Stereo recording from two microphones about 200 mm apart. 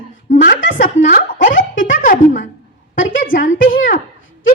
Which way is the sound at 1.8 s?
40° left (ahead or behind).